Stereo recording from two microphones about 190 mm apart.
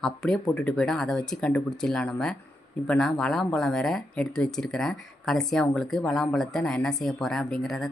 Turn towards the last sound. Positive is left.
turn(degrees=0)  # may be behind; listen again after turning